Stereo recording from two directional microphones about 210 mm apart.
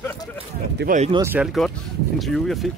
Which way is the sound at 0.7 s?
45° right (ahead or behind).